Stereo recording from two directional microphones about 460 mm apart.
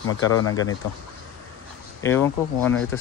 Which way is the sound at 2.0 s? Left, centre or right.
Centre.